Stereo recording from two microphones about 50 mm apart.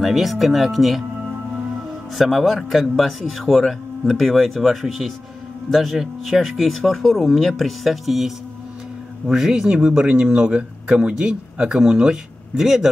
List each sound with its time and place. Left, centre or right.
0.0 s a man's voice: centre
2.1 s a man's voice: centre
9.3 s speech: centre